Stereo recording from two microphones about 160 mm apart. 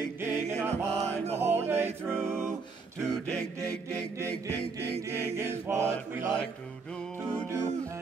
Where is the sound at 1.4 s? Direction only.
15° right (ahead or behind).